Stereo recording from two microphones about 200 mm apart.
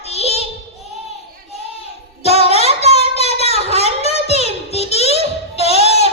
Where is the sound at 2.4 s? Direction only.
30° left (ahead or behind).